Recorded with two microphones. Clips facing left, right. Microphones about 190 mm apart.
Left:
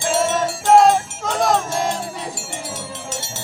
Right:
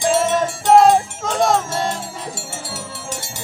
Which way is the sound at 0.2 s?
Centre (ahead or behind).